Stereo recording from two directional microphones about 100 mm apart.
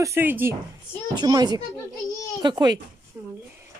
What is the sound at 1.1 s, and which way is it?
A child's voice, 45° right (ahead or behind).